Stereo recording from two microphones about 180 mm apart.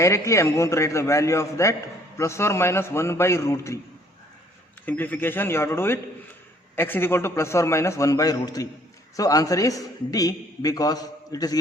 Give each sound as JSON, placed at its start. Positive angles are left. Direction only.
{"t": 0.0, "sound": "a man's voice", "side_deg": 15}
{"t": 4.9, "sound": "a man's voice", "side_deg": 10}